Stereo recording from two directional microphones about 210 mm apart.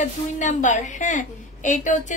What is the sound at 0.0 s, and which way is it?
A woman's voice, 35° left (ahead or behind).